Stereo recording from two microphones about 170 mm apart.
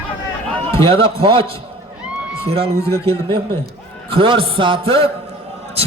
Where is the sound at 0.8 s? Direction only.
30° right (ahead or behind).